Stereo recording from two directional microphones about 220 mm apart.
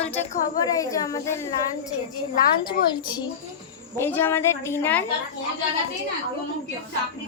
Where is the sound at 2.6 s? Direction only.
20° left (ahead or behind).